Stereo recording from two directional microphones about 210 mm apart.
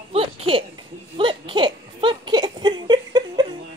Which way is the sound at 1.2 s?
25° right (ahead or behind).